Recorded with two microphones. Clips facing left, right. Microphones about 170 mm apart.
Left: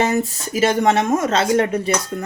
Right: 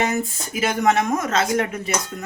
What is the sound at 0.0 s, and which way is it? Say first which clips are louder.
Speech: left 4 dB; 35° left (ahead or behind).